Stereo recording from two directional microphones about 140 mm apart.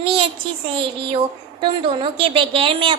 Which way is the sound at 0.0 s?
40° right (ahead or behind).